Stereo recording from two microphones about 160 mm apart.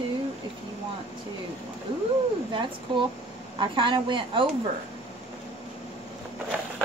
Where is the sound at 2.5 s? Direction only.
30° right (ahead or behind).